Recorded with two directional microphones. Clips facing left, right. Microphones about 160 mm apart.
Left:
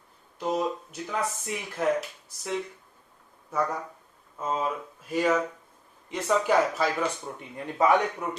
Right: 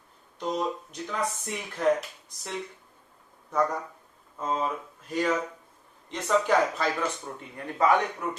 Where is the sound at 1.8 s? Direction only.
5° left (ahead or behind).